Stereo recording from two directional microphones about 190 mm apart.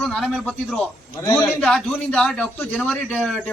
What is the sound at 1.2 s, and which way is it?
Speech, 15° left (ahead or behind).